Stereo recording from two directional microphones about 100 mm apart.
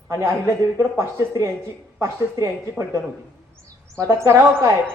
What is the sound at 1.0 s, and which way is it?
A man's voice, 30° right (ahead or behind).